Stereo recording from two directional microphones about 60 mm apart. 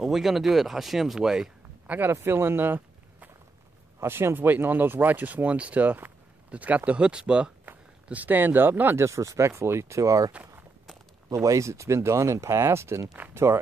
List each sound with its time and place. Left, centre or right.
0.0 s speech: centre
2.1 s speech: right; by 7.5 s centre
7.6 s speech: right
9.0 s speech: right
11.3 s speech: right